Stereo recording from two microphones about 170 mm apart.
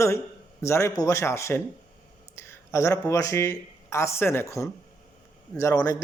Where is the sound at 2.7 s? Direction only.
15° left (ahead or behind).